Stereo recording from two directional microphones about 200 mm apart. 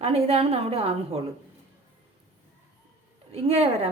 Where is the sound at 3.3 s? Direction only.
30° right (ahead or behind).